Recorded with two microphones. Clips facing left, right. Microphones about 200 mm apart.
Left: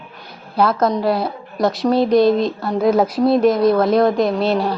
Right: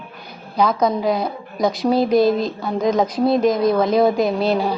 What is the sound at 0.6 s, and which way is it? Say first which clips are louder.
A woman's voice: left 1 dB; 5° left (ahead or behind).